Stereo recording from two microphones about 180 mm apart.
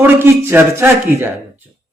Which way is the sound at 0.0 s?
15° right (ahead or behind).